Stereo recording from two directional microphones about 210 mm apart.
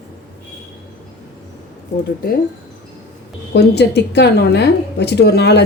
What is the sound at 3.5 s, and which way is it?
A woman's voice, 50° left (ahead or behind).